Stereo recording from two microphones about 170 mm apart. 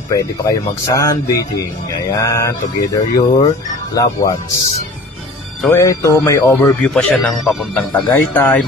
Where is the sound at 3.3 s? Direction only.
45° left (ahead or behind).